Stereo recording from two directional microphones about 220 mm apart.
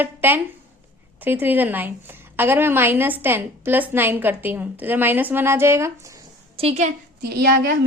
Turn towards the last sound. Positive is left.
turn(degrees=-45)  # may be behind; listen again after turning